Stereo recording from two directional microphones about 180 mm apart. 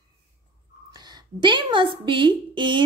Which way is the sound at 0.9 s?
25° right (ahead or behind).